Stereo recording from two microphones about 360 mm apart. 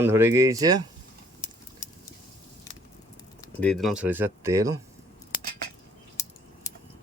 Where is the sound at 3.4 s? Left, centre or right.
Centre.